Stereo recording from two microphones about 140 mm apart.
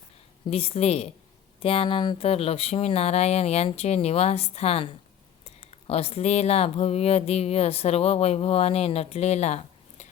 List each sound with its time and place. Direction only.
0.4 s speech: 45° left (ahead or behind)